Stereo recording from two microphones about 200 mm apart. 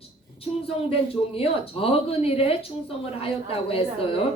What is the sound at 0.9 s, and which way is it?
Speech, 30° left (ahead or behind).